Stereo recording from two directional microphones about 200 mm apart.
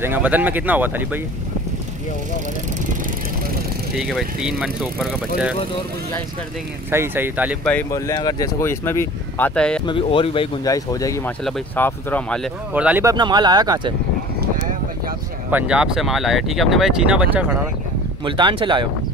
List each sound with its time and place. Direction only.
0.0 s speech: 10° right (ahead or behind)
3.9 s speech: 5° right (ahead or behind)
6.9 s speech: 10° right (ahead or behind)
7.6 s speech: 10° left (ahead or behind)
8.1 s speech: 20° left (ahead or behind)
9.8 s speech: 25° left (ahead or behind)
11.4 s speech: 5° left (ahead or behind)
12.7 s speech: 10° right (ahead or behind)
13.1 s speech: 20° right (ahead or behind)
15.5 s speech: 5° right (ahead or behind)
18.2 s speech: 25° right (ahead or behind)